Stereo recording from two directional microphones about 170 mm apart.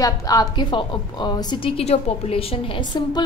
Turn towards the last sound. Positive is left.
turn(degrees=25)  # may be behind; listen again after turning